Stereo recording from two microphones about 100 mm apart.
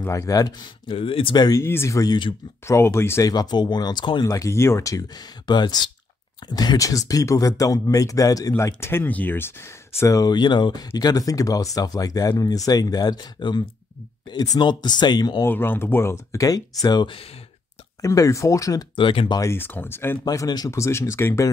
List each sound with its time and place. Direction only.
0.0 s speech: 30° left (ahead or behind)
0.8 s speech: 65° left (ahead or behind)
1.3 s speech: 45° left (ahead or behind)
1.6 s speech: 25° left (ahead or behind)
3.3 s speech: 45° left (ahead or behind)
4.2 s speech: 35° left (ahead or behind)
15.4 s speech: 20° left (ahead or behind)
18.9 s speech: 55° left (ahead or behind)
19.5 s speech: 20° left (ahead or behind)
20.2 s speech: 40° left (ahead or behind)
20.7 s speech: 30° left (ahead or behind)